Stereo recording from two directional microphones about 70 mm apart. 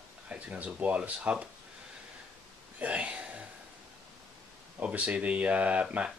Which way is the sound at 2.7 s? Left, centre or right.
Right.